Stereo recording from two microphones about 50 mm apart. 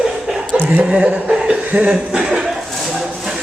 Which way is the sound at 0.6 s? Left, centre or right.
Right.